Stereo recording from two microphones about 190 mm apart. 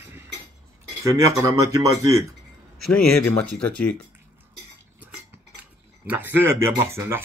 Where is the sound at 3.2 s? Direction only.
5° left (ahead or behind).